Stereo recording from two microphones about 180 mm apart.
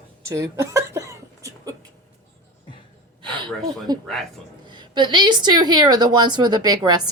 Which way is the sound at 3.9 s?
20° right (ahead or behind).